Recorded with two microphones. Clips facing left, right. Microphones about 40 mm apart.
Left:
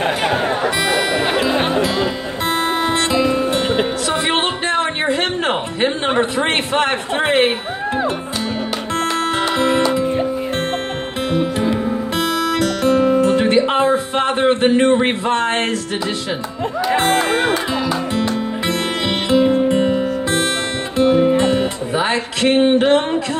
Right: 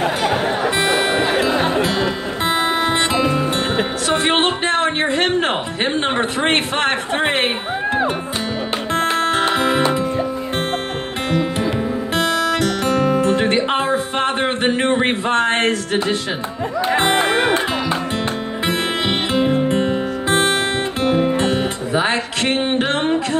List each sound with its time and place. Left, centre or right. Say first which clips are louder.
0.7 s music: even; right
2.4 s guitar: even; right
4.1 s music: right 5 dB; right
4.5 s speech: right 1 dB; centre
9.1 s music: right 1 dB; centre
12.2 s music: right 1 dB; centre
13.7 s speech: left 3 dB; centre
17.0 s music: right 1 dB; right
19.3 s music: left 5 dB; centre
19.7 s music: left 2 dB; centre
20.2 s guitar: right 6 dB; right
21.9 s speech: right 1 dB; centre